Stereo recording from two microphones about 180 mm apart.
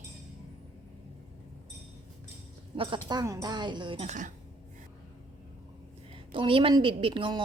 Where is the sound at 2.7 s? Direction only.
30° right (ahead or behind).